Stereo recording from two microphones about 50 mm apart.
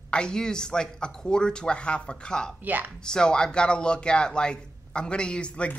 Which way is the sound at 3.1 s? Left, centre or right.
Centre.